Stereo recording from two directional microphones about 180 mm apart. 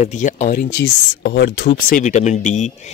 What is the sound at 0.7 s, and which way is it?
Speech, 75° left (ahead or behind).